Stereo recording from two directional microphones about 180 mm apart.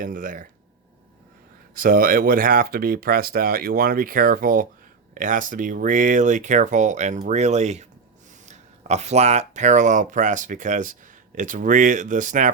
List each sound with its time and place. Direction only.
0.0 s speech: 50° right (ahead or behind)
1.7 s speech: 50° right (ahead or behind)